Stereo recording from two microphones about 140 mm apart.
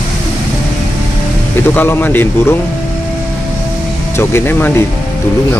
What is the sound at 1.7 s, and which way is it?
Speech, 15° left (ahead or behind).